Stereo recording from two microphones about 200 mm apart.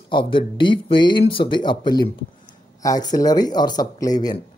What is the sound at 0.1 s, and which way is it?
Speech, 25° left (ahead or behind).